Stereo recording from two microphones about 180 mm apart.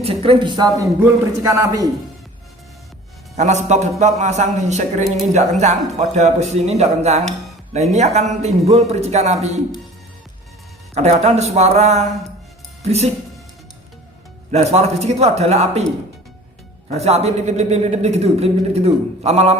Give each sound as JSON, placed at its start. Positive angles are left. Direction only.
{"t": 0.0, "sound": "a man's voice", "side_deg": -30}
{"t": 3.3, "sound": "a man's voice", "side_deg": -40}
{"t": 10.9, "sound": "a man's voice", "side_deg": -35}
{"t": 14.5, "sound": "a man's voice", "side_deg": -35}
{"t": 16.9, "sound": "a man's voice", "side_deg": -35}